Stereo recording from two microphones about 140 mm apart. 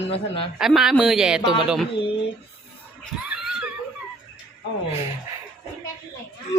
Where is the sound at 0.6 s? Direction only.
5° right (ahead or behind).